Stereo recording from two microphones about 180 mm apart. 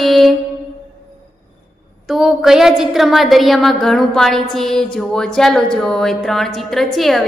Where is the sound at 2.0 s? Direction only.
Centre (ahead or behind).